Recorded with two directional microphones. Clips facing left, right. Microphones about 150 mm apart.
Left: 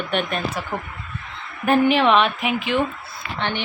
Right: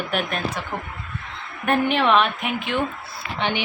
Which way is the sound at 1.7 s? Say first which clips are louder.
Left 3 dB; centre (ahead or behind).